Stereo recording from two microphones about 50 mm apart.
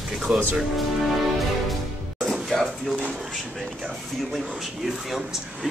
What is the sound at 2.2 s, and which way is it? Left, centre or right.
Music, centre.